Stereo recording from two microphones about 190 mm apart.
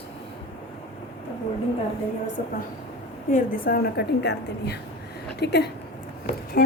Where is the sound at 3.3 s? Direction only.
50° left (ahead or behind).